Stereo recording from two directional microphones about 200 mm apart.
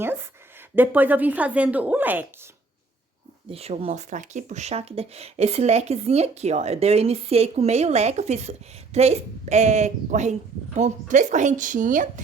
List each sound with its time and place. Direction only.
0.8 s a woman's voice: 10° right (ahead or behind)
3.5 s speech: 30° right (ahead or behind)